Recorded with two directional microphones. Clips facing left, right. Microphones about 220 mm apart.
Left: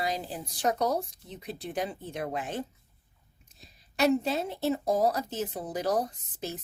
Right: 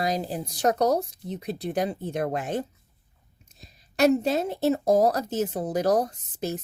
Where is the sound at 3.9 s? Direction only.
45° right (ahead or behind).